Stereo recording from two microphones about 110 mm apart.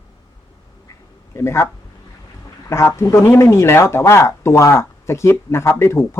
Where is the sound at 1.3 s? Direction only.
25° left (ahead or behind).